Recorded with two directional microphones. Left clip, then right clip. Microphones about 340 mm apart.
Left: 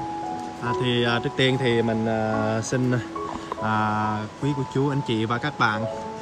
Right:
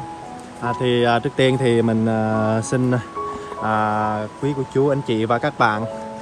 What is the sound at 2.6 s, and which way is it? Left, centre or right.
Speech, centre.